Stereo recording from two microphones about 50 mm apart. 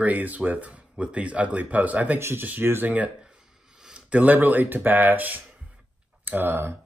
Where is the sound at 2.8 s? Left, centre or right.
Right.